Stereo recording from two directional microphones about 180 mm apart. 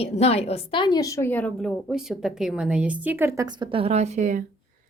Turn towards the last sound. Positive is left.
turn(degrees=-45)  # may be behind; listen again after turning